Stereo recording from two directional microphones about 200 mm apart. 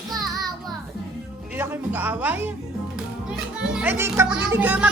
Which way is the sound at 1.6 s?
10° right (ahead or behind).